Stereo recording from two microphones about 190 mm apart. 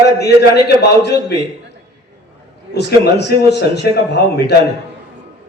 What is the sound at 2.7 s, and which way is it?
A man's voice, 60° left (ahead or behind).